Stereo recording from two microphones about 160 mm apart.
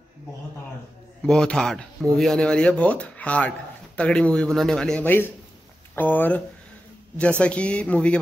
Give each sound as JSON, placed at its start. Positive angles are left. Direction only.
{"t": 1.2, "sound": "speech", "side_deg": 5}